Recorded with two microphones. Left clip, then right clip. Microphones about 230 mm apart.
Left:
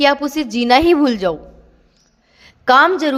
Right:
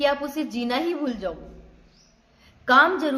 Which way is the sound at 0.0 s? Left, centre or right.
Left.